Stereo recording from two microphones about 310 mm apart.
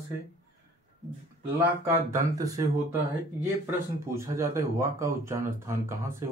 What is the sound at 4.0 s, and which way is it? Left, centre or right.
Speech, centre.